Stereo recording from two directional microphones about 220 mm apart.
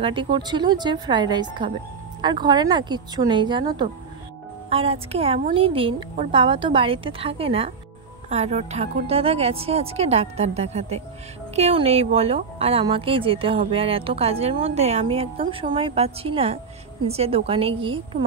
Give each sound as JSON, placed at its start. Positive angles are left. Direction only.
{"t": 0.0, "sound": "speech", "side_deg": -20}